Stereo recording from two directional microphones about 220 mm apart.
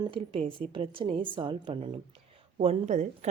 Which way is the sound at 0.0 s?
25° right (ahead or behind).